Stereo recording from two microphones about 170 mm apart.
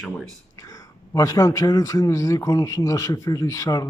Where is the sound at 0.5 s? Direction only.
20° left (ahead or behind).